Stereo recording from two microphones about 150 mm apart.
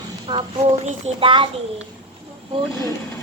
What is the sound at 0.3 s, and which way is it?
A child's voice, 35° right (ahead or behind).